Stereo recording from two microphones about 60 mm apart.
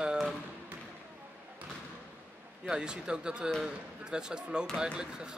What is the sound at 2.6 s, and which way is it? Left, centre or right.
Speech, centre.